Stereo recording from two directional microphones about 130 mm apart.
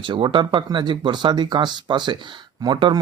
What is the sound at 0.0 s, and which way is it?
A man's voice, 40° right (ahead or behind).